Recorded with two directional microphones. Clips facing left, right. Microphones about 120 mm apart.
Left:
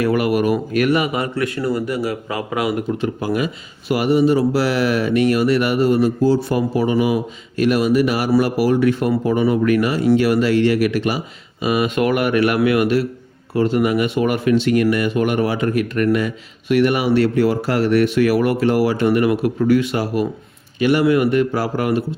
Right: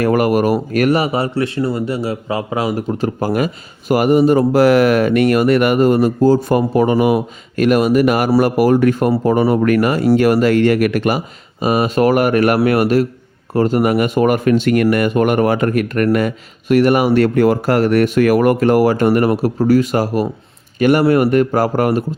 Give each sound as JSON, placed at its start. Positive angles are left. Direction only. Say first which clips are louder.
{"t": 0.0, "sound": "speech", "louder": "right 3 dB", "side_deg": -45}